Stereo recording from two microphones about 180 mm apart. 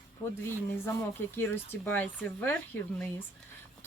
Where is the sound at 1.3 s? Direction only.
10° left (ahead or behind).